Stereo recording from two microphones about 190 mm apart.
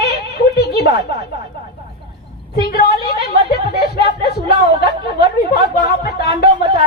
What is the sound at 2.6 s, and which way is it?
A woman's voice, 55° left (ahead or behind).